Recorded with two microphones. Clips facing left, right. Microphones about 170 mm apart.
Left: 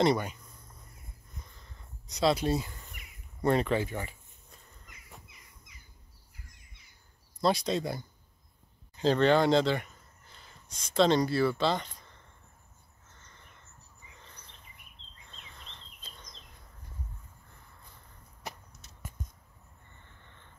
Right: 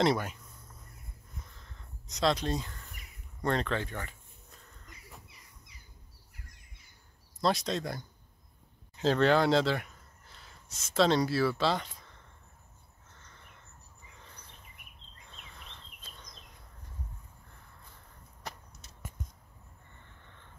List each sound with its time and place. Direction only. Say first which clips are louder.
0.0 s speech: left 2 dB; centre (ahead or behind)
1.5 s crow: even; centre (ahead or behind)
3.4 s speech: left 4 dB; 10° left (ahead or behind)
5.7 s a sound: even; 35° right (ahead or behind)
7.4 s speech: left 2 dB; centre (ahead or behind)
15.3 s a sound: even; 5° right (ahead or behind)